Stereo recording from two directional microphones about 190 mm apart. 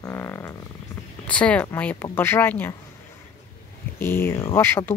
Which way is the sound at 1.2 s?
5° left (ahead or behind).